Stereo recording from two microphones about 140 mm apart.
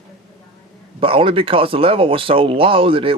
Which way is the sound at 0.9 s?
40° right (ahead or behind).